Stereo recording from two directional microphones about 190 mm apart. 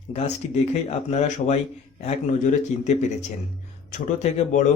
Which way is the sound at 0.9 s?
35° left (ahead or behind).